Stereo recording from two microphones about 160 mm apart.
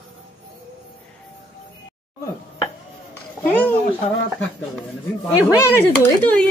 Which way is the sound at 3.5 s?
10° left (ahead or behind).